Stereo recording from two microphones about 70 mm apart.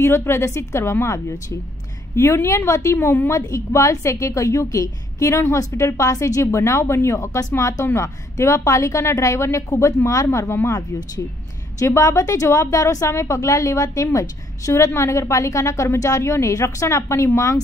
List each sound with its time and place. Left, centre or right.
0.0 s a woman's voice: left
11.8 s a woman's voice: left